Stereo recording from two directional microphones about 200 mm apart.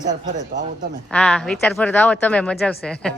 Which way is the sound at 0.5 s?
60° right (ahead or behind).